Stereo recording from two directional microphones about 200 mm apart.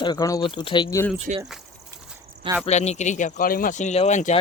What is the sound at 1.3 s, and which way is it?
Speech, 40° right (ahead or behind).